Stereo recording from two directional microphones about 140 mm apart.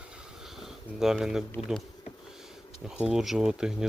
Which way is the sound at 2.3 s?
5° right (ahead or behind).